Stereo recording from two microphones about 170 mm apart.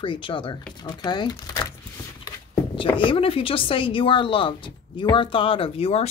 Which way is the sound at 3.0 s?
30° left (ahead or behind).